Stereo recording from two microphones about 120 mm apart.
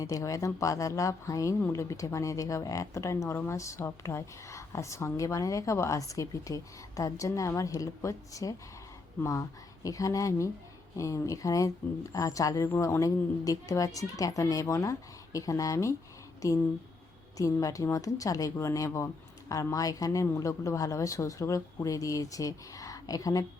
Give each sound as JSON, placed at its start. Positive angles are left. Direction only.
{"t": 0.0, "sound": "speech", "side_deg": 30}
{"t": 17.3, "sound": "speech", "side_deg": 30}